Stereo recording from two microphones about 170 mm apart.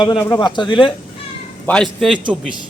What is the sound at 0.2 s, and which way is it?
Speech, 20° left (ahead or behind).